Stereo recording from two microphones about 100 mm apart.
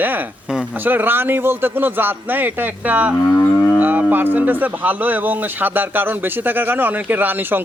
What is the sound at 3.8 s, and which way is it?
Speech, 15° right (ahead or behind).